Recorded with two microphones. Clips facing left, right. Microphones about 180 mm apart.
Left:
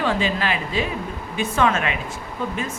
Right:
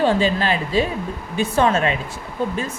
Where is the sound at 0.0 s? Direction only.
35° right (ahead or behind).